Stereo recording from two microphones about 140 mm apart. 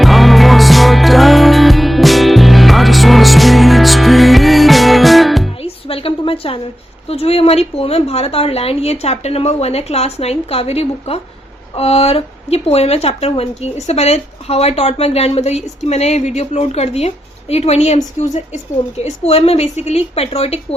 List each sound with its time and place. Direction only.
0.0 s music: centre (ahead or behind)
5.6 s a sound: 45° left (ahead or behind)
7.1 s speech: 45° left (ahead or behind)